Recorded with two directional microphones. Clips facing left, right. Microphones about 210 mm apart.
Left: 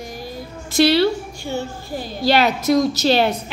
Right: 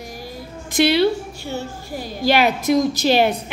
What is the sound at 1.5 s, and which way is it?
A woman's voice, 10° right (ahead or behind).